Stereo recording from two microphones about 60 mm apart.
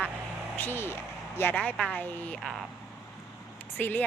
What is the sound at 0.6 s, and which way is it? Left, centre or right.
Speech, left.